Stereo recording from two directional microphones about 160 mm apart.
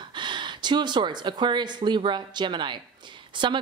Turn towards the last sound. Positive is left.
turn(degrees=-30)  # may be behind; listen again after turning